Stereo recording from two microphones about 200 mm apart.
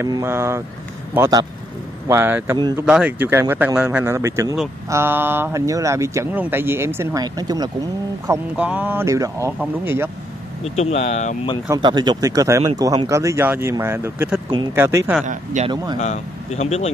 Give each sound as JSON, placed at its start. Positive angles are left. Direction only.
{"t": 0.0, "sound": "speech", "side_deg": -15}
{"t": 2.8, "sound": "speech", "side_deg": -5}
{"t": 8.3, "sound": "speech", "side_deg": -5}
{"t": 10.6, "sound": "speech", "side_deg": 30}
{"t": 11.7, "sound": "speech", "side_deg": -20}
{"t": 15.2, "sound": "a man's voice", "side_deg": -35}
{"t": 15.7, "sound": "a man's voice", "side_deg": -20}
{"t": 16.0, "sound": "speech", "side_deg": 35}